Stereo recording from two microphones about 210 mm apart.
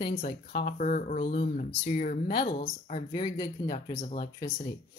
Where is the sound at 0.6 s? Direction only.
40° left (ahead or behind).